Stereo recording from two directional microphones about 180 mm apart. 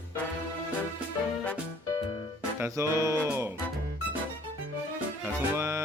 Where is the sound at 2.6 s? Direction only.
15° right (ahead or behind).